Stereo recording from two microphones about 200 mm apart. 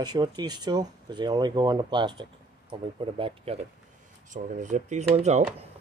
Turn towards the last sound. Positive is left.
turn(degrees=-35)  # may be behind; listen again after turning